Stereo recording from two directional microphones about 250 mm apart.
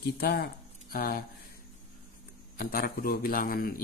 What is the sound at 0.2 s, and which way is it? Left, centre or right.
A man's voice, left.